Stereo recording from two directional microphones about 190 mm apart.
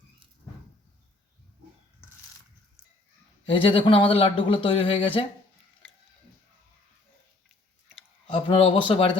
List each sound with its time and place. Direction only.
3.5 s speech: 25° left (ahead or behind)
8.3 s speech: 30° left (ahead or behind)